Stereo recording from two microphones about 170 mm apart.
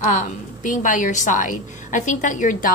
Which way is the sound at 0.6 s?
50° left (ahead or behind).